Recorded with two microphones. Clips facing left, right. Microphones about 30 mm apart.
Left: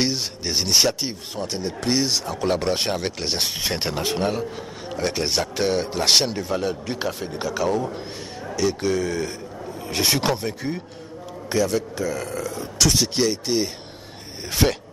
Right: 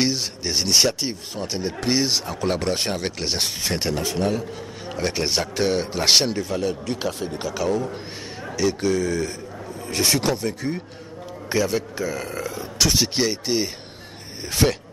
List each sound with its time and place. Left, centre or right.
0.0 s a man's voice: centre
1.4 s a man's voice: centre
4.8 s a man's voice: centre
6.6 s a man's voice: centre
8.9 s speech: centre
11.4 s a man's voice: centre
12.5 s a man's voice: centre
14.4 s a man's voice: centre